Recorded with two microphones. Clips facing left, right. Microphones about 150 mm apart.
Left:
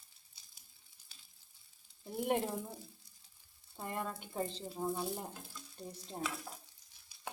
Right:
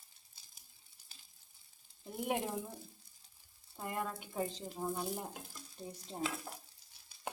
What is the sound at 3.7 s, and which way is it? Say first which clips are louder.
Speech: right 1 dB; 5° right (ahead or behind).